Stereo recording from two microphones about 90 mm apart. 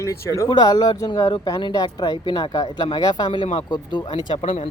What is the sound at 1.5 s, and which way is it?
Speech, 50° left (ahead or behind).